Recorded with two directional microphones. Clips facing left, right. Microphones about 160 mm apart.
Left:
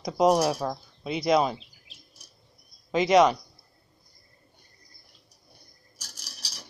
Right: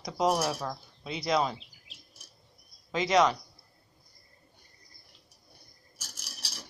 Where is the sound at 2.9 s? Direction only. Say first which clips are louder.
Left 5 dB; 15° left (ahead or behind).